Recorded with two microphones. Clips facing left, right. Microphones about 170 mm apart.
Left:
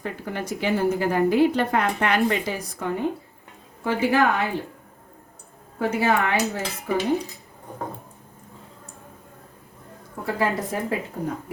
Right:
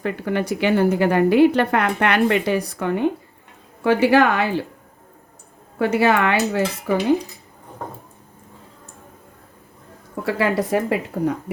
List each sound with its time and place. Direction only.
0.0 s a woman's voice: 70° right (ahead or behind)
5.8 s a woman's voice: 75° right (ahead or behind)
10.2 s a woman's voice: 75° right (ahead or behind)